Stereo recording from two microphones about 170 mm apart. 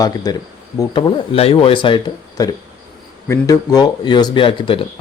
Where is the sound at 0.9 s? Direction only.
35° left (ahead or behind).